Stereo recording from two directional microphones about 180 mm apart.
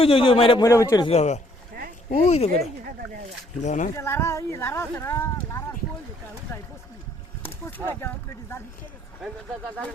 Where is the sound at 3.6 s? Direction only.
45° left (ahead or behind).